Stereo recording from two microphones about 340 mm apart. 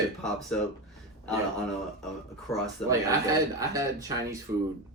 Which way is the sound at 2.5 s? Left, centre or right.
Centre.